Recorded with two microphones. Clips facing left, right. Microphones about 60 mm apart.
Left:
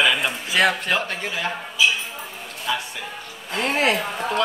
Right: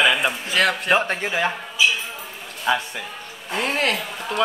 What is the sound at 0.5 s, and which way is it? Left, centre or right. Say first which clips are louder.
Speech: left 2 dB; centre.